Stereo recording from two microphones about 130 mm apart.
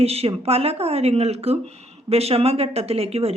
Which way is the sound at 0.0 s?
50° right (ahead or behind).